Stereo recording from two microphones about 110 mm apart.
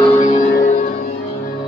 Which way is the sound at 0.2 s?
90° left.